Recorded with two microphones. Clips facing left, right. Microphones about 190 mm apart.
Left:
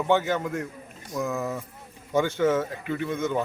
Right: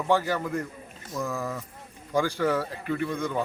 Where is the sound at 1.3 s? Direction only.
20° left (ahead or behind).